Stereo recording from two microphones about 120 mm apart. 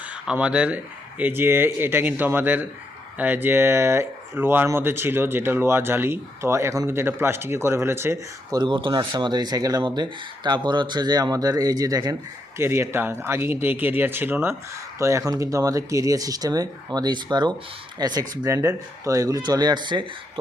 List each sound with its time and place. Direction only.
0.3 s speech: 10° right (ahead or behind)
8.4 s speech: 35° right (ahead or behind)